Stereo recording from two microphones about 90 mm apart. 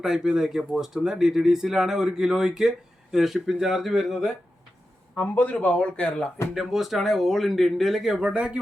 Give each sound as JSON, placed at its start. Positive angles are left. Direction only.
{"t": 0.0, "sound": "speech", "side_deg": -5}
{"t": 5.2, "sound": "a man's voice", "side_deg": 15}
{"t": 6.5, "sound": "speech", "side_deg": 0}